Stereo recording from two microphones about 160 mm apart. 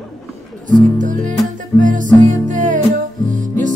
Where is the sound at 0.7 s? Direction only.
55° right (ahead or behind).